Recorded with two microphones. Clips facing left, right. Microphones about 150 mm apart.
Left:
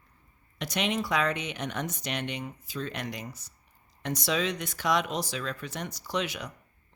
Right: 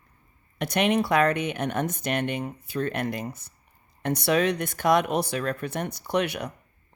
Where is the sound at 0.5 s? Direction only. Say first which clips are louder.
Right 7 dB; 55° right (ahead or behind).